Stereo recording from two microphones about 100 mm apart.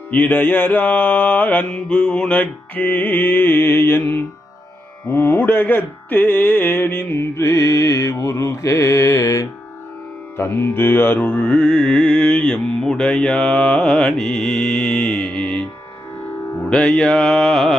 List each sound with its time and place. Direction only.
0.1 s mantra: 20° left (ahead or behind); by 9.5 s 35° left (ahead or behind)
10.3 s music: 25° left (ahead or behind)
16.6 s mantra: 10° left (ahead or behind)